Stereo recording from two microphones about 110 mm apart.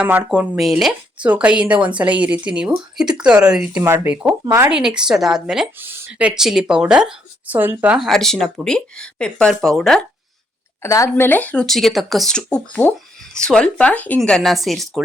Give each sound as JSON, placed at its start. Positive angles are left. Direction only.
{"t": 0.0, "sound": "speech", "side_deg": -15}
{"t": 0.3, "sound": "speech", "side_deg": -5}
{"t": 3.8, "sound": "speech", "side_deg": -20}
{"t": 5.8, "sound": "speech", "side_deg": -20}
{"t": 7.9, "sound": "speech", "side_deg": 0}
{"t": 10.8, "sound": "a woman's voice", "side_deg": 25}
{"t": 11.1, "sound": "speech", "side_deg": 15}